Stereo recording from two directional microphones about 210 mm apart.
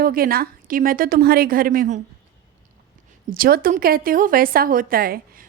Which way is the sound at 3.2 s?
40° right (ahead or behind).